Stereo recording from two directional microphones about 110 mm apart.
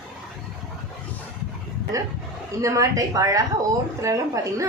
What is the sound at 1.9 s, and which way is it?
A woman's voice, 30° right (ahead or behind).